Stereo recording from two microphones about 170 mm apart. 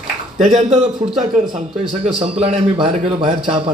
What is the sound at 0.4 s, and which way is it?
Speech, 40° right (ahead or behind).